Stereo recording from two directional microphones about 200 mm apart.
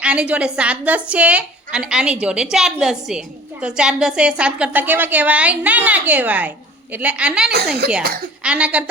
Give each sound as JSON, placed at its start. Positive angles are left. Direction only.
{"t": 0.0, "sound": "a woman's voice", "side_deg": -5}
{"t": 7.5, "sound": "a woman's voice", "side_deg": -50}
{"t": 8.4, "sound": "a woman's voice", "side_deg": -5}